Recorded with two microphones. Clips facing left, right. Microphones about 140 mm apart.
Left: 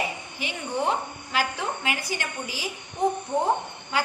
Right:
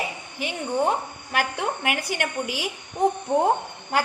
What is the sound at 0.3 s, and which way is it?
A woman's voice, 50° right (ahead or behind).